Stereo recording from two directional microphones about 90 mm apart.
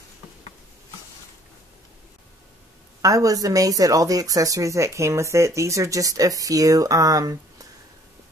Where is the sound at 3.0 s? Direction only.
40° right (ahead or behind).